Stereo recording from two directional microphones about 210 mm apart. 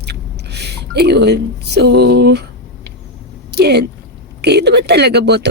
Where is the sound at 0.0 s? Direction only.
50° right (ahead or behind).